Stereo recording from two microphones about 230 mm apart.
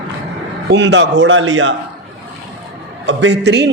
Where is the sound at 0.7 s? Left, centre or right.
Right.